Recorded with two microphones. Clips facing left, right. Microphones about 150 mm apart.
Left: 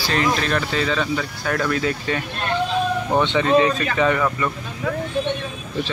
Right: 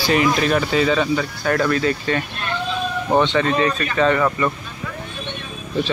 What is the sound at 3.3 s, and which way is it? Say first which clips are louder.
Speech: left 2 dB; 10° left (ahead or behind).